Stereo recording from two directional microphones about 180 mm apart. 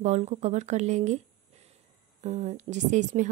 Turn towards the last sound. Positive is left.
turn(degrees=-40)  # may be behind; listen again after turning